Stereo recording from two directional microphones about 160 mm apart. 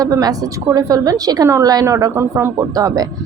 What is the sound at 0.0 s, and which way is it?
A woman's voice, 25° right (ahead or behind).